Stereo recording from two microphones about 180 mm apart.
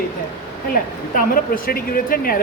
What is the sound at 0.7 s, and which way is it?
A woman's voice, 50° left (ahead or behind).